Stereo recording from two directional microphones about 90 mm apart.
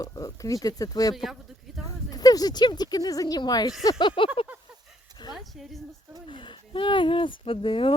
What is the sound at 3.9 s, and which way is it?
Speech, 80° left.